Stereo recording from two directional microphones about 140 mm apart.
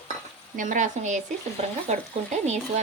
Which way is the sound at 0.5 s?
65° right (ahead or behind).